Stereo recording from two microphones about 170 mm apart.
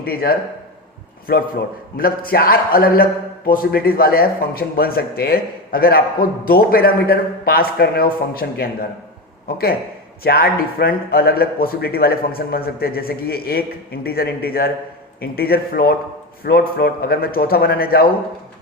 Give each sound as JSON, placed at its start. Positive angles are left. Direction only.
{"t": 0.0, "sound": "a man's voice", "side_deg": 60}
{"t": 10.2, "sound": "a man's voice", "side_deg": 65}